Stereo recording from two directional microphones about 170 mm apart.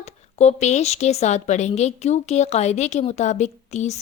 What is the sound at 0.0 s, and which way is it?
A woman's voice, 40° left (ahead or behind).